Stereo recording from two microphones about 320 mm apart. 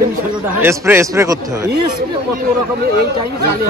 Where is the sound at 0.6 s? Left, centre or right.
Centre.